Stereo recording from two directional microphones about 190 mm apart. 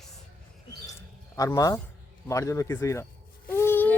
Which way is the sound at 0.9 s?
15° left (ahead or behind).